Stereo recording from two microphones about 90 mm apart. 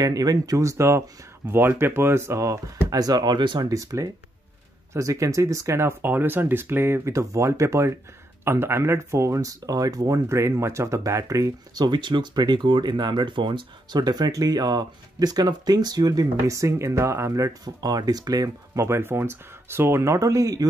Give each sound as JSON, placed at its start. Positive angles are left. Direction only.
{"t": 0.0, "sound": "speech", "side_deg": -45}
{"t": 2.9, "sound": "speech", "side_deg": -45}
{"t": 3.6, "sound": "speech", "side_deg": -40}
{"t": 18.9, "sound": "speech", "side_deg": -25}